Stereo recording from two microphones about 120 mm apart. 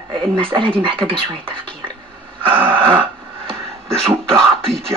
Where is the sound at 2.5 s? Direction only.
45° right (ahead or behind).